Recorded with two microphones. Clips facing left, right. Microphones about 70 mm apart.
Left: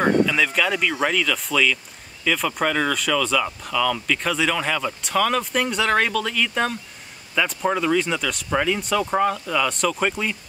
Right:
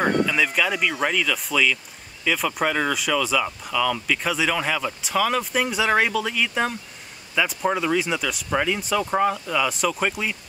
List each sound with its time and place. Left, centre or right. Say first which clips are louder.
0.0 s speech: left 2 dB; centre